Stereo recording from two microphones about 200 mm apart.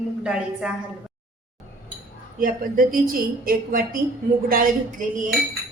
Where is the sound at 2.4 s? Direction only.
45° right (ahead or behind).